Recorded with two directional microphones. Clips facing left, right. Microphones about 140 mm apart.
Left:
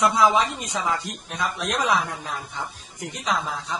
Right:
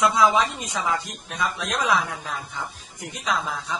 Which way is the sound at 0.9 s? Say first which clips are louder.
Even; 50° left (ahead or behind).